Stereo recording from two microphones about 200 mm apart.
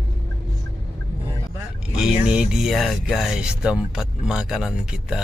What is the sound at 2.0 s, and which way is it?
Speech, 5° right (ahead or behind).